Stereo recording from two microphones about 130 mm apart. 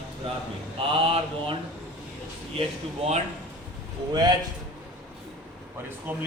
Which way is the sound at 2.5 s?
55° right (ahead or behind).